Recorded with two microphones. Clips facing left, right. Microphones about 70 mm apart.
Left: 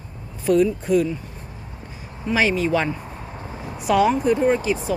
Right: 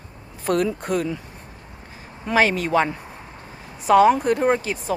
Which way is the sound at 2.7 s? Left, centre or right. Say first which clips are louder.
Right 2 dB; right.